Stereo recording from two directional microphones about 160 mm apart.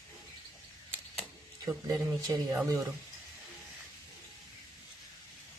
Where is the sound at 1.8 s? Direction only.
20° right (ahead or behind).